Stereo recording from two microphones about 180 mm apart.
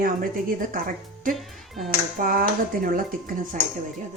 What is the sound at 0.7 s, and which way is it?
Speech, 50° right (ahead or behind).